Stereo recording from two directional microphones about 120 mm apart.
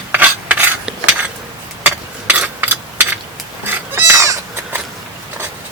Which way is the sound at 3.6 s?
20° right (ahead or behind).